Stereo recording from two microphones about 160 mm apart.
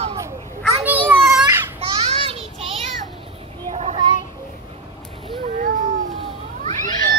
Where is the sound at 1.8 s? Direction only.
35° right (ahead or behind).